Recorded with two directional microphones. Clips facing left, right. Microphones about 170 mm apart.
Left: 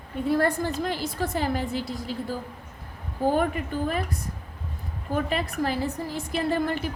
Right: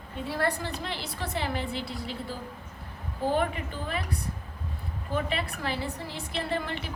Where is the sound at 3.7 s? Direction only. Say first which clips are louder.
Left 9 dB; 45° left (ahead or behind).